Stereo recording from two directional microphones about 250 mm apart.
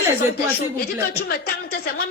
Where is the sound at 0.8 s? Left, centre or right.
Left.